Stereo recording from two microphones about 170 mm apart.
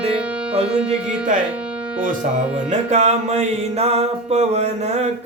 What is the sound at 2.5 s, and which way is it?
Music, 40° right (ahead or behind).